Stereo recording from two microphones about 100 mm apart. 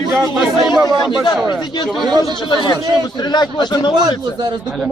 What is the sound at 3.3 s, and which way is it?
Speech, 45° left (ahead or behind).